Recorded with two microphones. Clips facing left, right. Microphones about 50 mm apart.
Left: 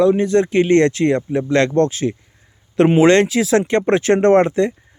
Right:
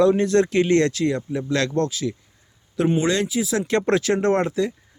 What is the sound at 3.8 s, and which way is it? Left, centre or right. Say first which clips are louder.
Speech: left 4 dB; left.